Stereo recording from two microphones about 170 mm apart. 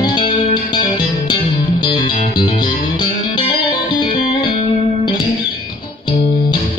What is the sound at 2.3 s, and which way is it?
Music, 30° left (ahead or behind).